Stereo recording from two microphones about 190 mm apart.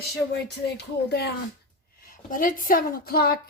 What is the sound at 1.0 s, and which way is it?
Speech, 60° left (ahead or behind).